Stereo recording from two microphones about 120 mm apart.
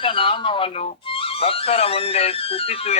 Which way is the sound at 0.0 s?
45° left (ahead or behind).